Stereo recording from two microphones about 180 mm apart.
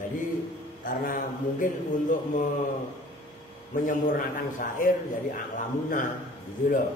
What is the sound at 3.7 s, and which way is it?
A man's voice, 50° left (ahead or behind).